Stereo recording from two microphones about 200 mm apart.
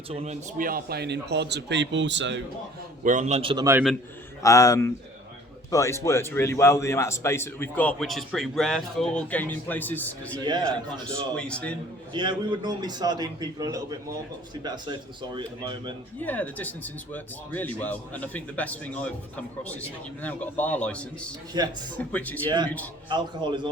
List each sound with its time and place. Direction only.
0.1 s a man's voice: 30° right (ahead or behind); by 2.4 s 65° right (ahead or behind)
3.0 s a man's voice: 40° right (ahead or behind)
4.4 s a man's voice: 15° left (ahead or behind)
10.4 s a man's voice: 20° right (ahead or behind)
11.0 s speech: 5° left (ahead or behind)
12.1 s a man's voice: 25° right (ahead or behind)
16.1 s a man's voice: 10° left (ahead or behind)
21.5 s a man's voice: 20° right (ahead or behind)
21.9 s a man's voice: 10° left (ahead or behind)
22.4 s a man's voice: 20° right (ahead or behind)